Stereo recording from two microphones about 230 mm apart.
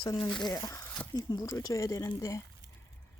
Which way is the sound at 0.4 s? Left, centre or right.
Centre.